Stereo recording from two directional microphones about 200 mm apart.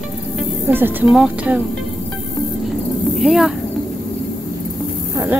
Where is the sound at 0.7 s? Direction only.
10° right (ahead or behind).